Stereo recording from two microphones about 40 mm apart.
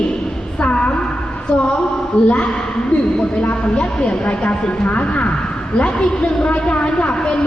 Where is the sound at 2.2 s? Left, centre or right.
Left.